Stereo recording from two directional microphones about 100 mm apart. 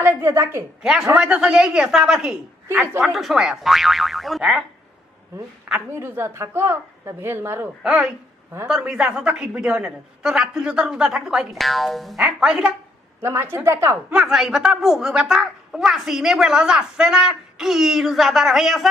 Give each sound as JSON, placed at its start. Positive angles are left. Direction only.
{"t": 0.0, "sound": "a woman's voice", "side_deg": -25}
{"t": 0.8, "sound": "a woman's voice", "side_deg": -10}
{"t": 5.9, "sound": "a woman's voice", "side_deg": -25}
{"t": 8.8, "sound": "a woman's voice", "side_deg": -10}
{"t": 13.2, "sound": "a woman's voice", "side_deg": -25}
{"t": 14.1, "sound": "a child's voice", "side_deg": -5}